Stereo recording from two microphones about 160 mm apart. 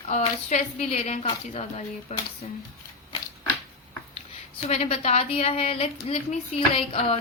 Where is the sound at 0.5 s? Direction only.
45° left (ahead or behind).